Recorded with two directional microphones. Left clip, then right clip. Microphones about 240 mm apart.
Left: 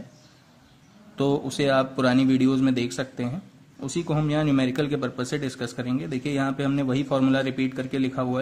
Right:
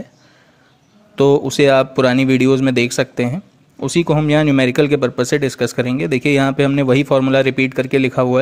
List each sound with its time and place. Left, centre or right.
1.1 s speech: right